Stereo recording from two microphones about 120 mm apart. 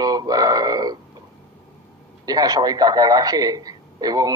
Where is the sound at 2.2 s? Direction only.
30° right (ahead or behind).